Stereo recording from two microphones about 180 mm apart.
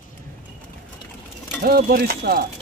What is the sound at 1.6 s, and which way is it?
Speech, 55° right (ahead or behind).